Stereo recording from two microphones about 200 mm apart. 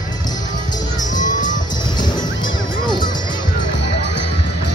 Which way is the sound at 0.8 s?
40° left (ahead or behind).